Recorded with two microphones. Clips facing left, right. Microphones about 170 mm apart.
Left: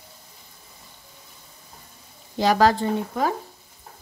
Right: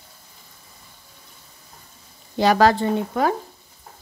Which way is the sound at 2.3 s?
65° right (ahead or behind).